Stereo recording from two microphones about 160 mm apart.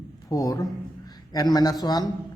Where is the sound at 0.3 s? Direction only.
25° left (ahead or behind).